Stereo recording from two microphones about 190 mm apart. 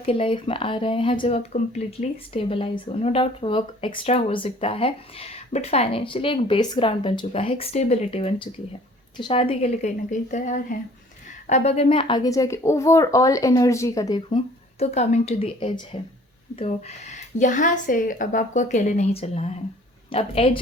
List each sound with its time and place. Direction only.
0.0 s speech: 30° left (ahead or behind)